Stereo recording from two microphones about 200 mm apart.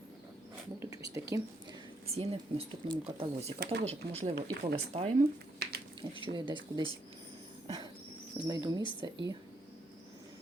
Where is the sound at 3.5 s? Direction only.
50° right (ahead or behind).